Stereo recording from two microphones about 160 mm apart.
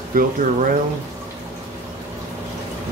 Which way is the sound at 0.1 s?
60° right (ahead or behind).